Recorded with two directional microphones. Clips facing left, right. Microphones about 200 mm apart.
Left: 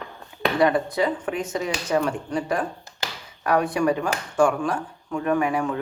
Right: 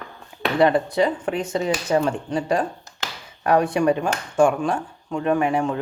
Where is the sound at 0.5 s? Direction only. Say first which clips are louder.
Right 3 dB; 30° right (ahead or behind).